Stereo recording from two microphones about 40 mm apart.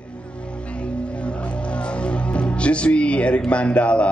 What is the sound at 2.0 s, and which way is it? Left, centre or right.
Music, left.